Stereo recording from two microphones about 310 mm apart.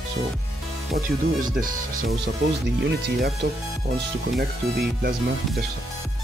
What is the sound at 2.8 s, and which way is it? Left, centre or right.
Speech, right.